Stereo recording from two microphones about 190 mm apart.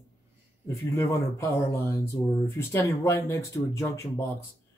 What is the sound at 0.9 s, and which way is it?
Speech, 15° left (ahead or behind).